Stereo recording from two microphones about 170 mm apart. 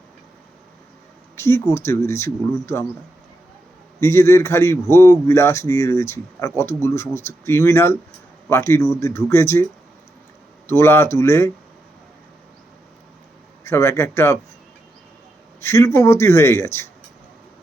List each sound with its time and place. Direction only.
1.4 s speech: 15° left (ahead or behind)
4.0 s speech: 15° left (ahead or behind)
10.7 s speech: 15° left (ahead or behind)
13.7 s speech: 15° left (ahead or behind)
15.6 s speech: 15° left (ahead or behind)